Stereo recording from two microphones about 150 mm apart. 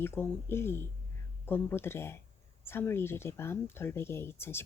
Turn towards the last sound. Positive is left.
turn(degrees=15)  # may be behind; listen again after turning